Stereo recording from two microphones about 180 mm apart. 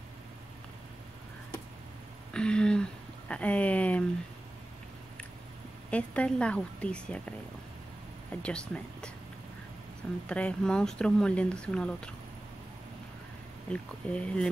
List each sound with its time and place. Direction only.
2.3 s speech: 5° left (ahead or behind)
5.9 s speech: 5° left (ahead or behind)
10.2 s speech: 5° left (ahead or behind)
13.7 s speech: 5° left (ahead or behind)